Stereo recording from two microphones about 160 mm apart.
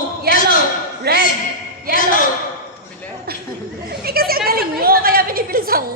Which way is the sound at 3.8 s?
70° right (ahead or behind).